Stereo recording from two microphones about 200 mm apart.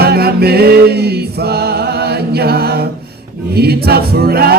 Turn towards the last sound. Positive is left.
turn(degrees=-50)  # may be behind; listen again after turning